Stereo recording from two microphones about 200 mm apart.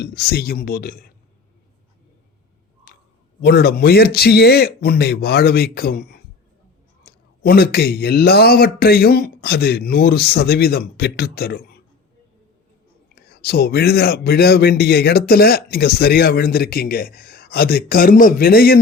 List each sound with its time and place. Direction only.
0.0 s speech: 50° left (ahead or behind)
3.4 s speech: 50° left (ahead or behind)
13.1 s speech: 50° left (ahead or behind)